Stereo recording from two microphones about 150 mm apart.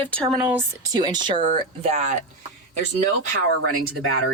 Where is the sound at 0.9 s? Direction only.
30° right (ahead or behind).